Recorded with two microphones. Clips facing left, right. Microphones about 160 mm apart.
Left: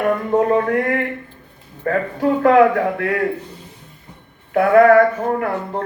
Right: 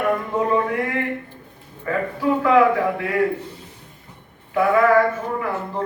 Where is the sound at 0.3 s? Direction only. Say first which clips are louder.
Left 7 dB; 50° left (ahead or behind).